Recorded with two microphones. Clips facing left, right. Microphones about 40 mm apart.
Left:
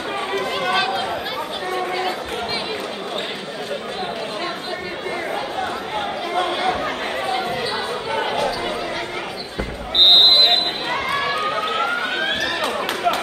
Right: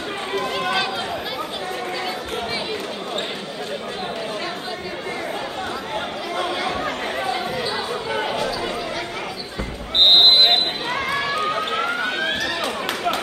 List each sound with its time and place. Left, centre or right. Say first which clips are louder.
0.4 s chatter: left 1 dB; centre
8.3 s chatter: left 2 dB; left
11.4 s run: left 1 dB; centre